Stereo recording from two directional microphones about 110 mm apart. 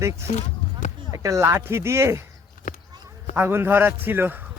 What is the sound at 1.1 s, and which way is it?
Speech, 25° right (ahead or behind).